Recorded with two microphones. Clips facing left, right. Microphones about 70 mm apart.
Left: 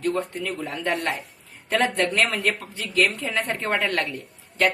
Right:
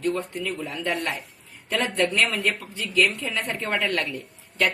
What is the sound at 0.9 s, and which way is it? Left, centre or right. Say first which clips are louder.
A woman's voice: left 2 dB; left.